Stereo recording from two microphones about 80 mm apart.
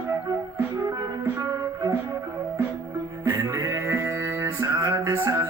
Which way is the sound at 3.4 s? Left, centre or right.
Right.